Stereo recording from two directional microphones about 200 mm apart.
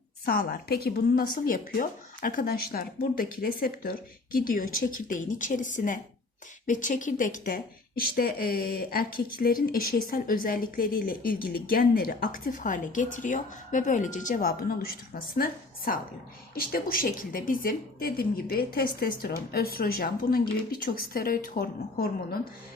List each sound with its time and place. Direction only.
0.3 s a woman's voice: 50° left (ahead or behind)